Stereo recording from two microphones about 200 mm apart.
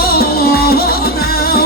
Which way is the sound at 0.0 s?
50° left (ahead or behind).